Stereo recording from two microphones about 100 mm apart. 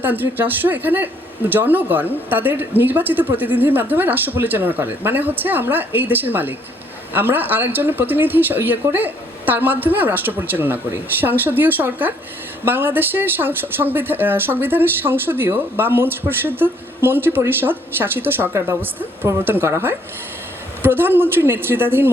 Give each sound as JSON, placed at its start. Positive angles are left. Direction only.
{"t": 0.0, "sound": "speech", "side_deg": -20}